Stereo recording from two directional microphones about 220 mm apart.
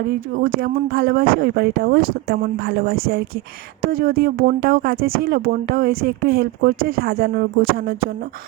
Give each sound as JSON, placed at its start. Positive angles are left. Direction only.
{"t": 0.3, "sound": "speech", "side_deg": -45}